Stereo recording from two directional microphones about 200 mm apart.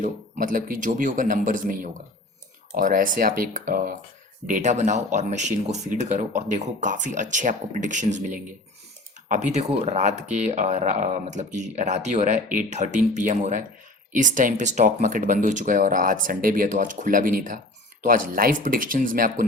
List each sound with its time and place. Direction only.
0.0 s speech: 40° right (ahead or behind)